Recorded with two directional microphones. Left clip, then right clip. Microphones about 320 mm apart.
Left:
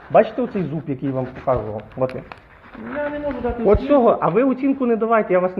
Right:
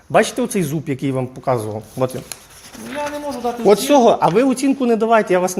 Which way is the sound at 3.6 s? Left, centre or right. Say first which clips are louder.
Right 3 dB; right.